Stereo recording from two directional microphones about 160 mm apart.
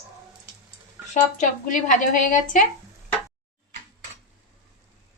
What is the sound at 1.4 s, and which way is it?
A woman's voice, 55° left (ahead or behind).